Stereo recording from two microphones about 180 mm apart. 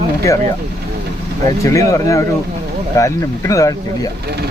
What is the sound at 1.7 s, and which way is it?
Speech, 15° left (ahead or behind).